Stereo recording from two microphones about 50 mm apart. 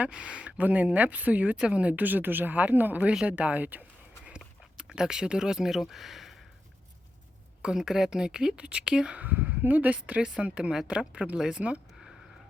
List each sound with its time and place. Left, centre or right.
0.0 s speech: centre
0.6 s speech: right
4.3 s a sound: centre
7.6 s a woman's voice: centre
9.1 s speech: right
10.2 s a woman's voice: centre